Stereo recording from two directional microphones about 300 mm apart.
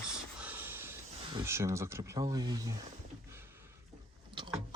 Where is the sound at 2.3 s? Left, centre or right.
Centre.